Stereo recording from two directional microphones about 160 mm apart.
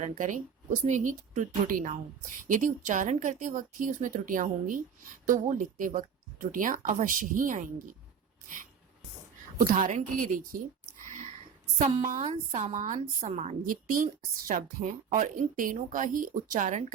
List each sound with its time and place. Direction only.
0.0 s a woman's voice: 55° right (ahead or behind)
9.6 s speech: 55° right (ahead or behind)
12.2 s a woman's voice: 35° right (ahead or behind)